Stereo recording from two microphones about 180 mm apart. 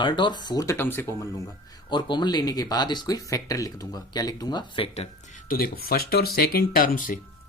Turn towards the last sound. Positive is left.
turn(degrees=50)  # may be behind; listen again after turning